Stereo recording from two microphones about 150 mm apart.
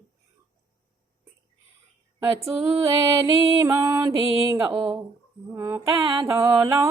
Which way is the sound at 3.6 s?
20° right (ahead or behind).